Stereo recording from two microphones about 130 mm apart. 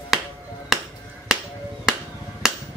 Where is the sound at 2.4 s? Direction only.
5° right (ahead or behind).